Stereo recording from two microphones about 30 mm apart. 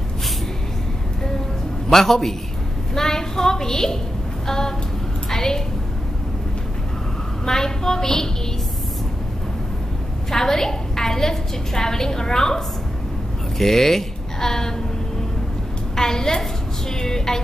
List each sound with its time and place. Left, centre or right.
1.9 s a woman's voice: centre
5.3 s a sound: centre
7.4 s a woman's voice: centre
10.3 s a woman's voice: centre
13.6 s speech: centre
16.0 s a woman's voice: centre
17.0 s a sound: centre